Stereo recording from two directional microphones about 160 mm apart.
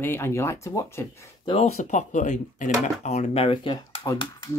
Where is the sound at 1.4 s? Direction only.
40° left (ahead or behind).